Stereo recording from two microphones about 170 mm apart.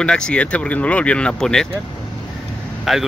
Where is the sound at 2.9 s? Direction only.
Centre (ahead or behind).